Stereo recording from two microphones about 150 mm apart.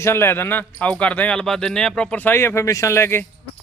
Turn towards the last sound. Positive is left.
turn(degrees=15)  # may be behind; listen again after turning